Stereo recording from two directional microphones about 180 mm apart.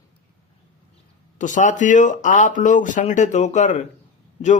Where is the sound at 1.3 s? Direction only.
45° left (ahead or behind).